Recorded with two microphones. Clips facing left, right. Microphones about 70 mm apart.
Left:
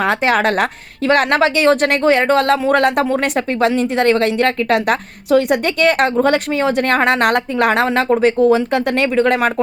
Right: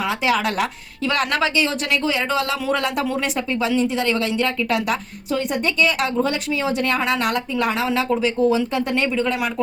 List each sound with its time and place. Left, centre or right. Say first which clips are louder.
0.0 s a woman's voice: left 6 dB; left